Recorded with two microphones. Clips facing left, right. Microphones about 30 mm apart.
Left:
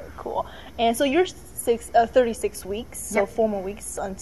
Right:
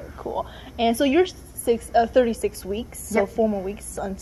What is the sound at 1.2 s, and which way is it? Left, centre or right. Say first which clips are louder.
A woman's voice: right 2 dB; right.